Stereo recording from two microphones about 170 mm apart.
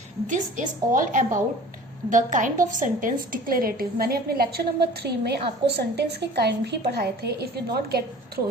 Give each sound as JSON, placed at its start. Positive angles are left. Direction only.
{"t": 0.3, "sound": "a woman's voice", "side_deg": -50}